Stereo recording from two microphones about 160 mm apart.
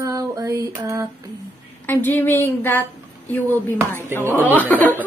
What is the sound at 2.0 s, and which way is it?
Speech, 15° left (ahead or behind).